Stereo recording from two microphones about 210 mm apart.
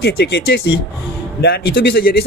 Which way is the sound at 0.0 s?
50° left (ahead or behind).